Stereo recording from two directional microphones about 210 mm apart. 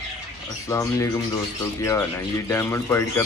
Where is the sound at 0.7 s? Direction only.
15° left (ahead or behind).